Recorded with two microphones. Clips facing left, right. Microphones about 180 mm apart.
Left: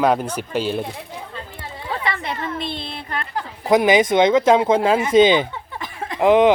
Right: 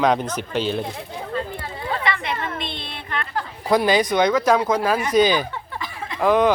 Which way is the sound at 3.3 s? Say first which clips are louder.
Left 3 dB; 20° left (ahead or behind).